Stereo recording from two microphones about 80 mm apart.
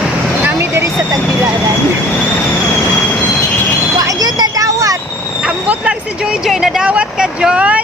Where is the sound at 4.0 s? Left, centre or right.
Right.